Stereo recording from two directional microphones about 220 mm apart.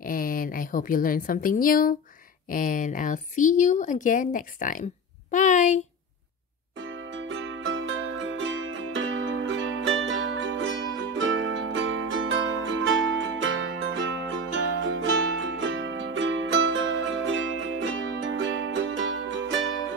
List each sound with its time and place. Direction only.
0.0 s a woman's voice: 40° left (ahead or behind)
5.3 s a sound: 35° left (ahead or behind)
6.8 s music: 60° right (ahead or behind)